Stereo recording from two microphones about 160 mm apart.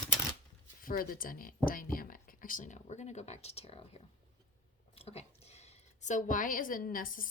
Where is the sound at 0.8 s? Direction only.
65° left (ahead or behind).